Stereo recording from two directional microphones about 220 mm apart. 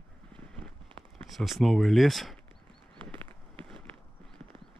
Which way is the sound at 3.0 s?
20° right (ahead or behind).